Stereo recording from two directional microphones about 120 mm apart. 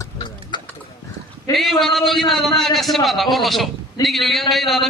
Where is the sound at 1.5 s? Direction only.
Centre (ahead or behind).